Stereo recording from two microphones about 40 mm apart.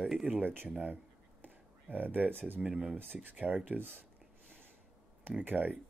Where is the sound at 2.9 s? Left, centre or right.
Right.